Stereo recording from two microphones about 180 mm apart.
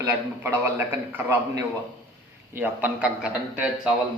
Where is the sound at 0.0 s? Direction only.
15° right (ahead or behind).